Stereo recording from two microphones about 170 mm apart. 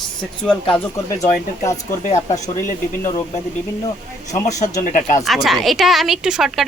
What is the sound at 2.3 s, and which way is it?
Speech, 50° left (ahead or behind).